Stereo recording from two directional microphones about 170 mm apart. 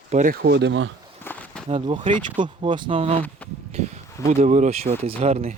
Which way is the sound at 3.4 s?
10° left (ahead or behind).